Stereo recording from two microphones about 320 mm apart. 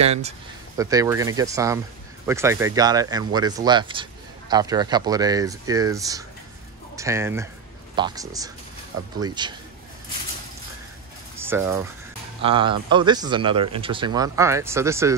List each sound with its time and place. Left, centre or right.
0.0 s speech: centre
11.3 s a sound: centre
12.4 s speech: centre